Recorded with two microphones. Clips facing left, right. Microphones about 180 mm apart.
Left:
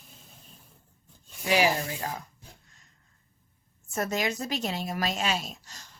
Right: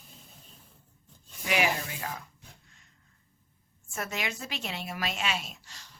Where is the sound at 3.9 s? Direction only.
40° left (ahead or behind).